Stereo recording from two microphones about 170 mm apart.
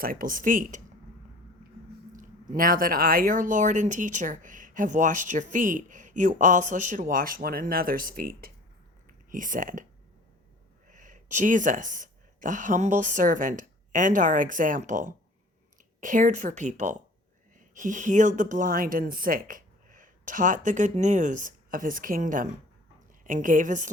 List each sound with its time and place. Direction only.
0.0 s speech: 55° right (ahead or behind)
2.1 s speech: 50° right (ahead or behind)
9.0 s a sound: 50° right (ahead or behind)
10.8 s speech: 50° right (ahead or behind)